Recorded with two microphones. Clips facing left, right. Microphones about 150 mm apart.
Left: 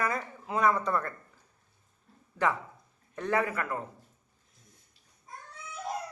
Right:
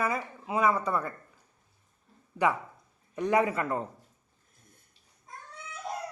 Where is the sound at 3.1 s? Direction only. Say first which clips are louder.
Right 4 dB; 15° right (ahead or behind).